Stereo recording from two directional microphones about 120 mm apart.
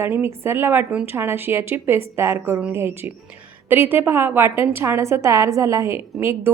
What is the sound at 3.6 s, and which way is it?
A woman's voice, 15° right (ahead or behind).